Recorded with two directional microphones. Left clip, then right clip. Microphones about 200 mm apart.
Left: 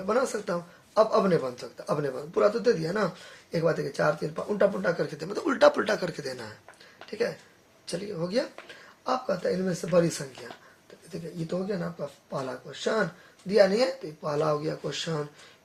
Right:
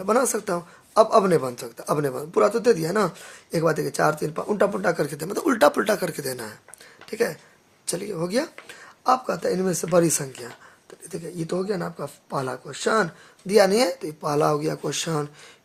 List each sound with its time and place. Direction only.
0.0 s speech: 45° right (ahead or behind)
7.9 s speech: 45° right (ahead or behind)
13.5 s speech: 45° right (ahead or behind)